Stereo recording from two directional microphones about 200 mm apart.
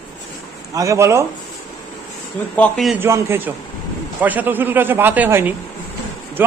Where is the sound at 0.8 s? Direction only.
15° right (ahead or behind).